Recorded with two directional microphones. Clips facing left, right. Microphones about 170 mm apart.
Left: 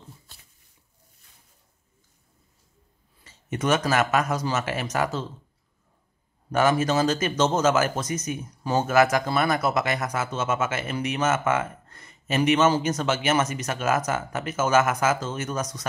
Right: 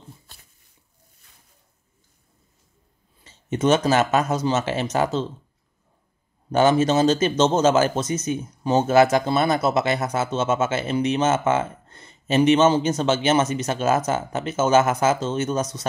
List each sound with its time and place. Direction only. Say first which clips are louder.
3.3 s speech: right 5 dB; 25° right (ahead or behind)
6.5 s speech: right 4 dB; 25° right (ahead or behind)